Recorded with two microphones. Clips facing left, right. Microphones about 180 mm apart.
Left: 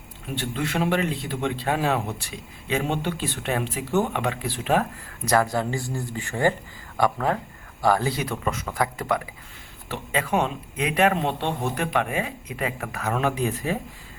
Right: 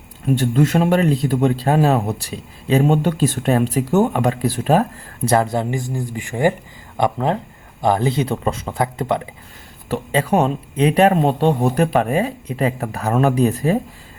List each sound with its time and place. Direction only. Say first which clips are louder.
0.3 s a man's voice: right 9 dB; 45° right (ahead or behind)